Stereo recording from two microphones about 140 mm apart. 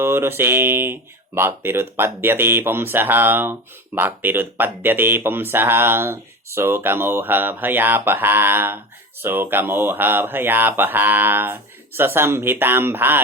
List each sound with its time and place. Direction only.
0.0 s speech: 15° right (ahead or behind)